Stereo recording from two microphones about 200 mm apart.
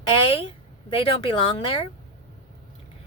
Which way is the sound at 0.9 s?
25° left (ahead or behind).